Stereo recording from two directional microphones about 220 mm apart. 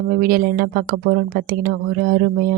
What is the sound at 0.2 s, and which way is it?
Speech, 40° right (ahead or behind).